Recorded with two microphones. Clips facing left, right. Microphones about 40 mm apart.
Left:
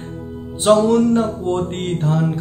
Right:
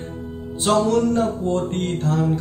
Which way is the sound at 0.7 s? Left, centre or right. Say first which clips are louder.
Left 5 dB; left.